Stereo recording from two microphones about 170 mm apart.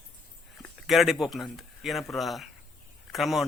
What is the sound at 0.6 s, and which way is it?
A man's voice, centre (ahead or behind).